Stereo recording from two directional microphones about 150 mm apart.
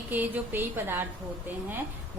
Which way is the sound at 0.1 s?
10° right (ahead or behind).